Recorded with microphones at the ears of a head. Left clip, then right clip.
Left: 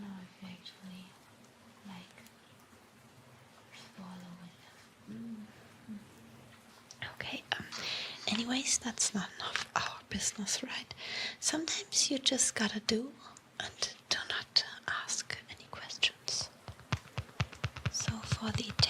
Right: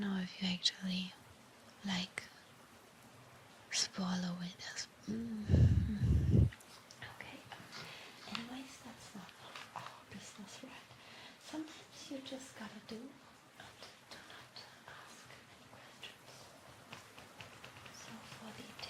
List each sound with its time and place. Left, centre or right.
0.0 s whispering: right
3.7 s whispering: right
7.0 s whispering: left